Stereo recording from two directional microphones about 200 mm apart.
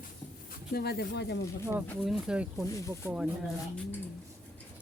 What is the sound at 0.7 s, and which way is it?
Speech, 50° left (ahead or behind).